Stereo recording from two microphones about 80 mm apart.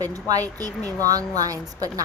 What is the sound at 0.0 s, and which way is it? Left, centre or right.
Speech, right.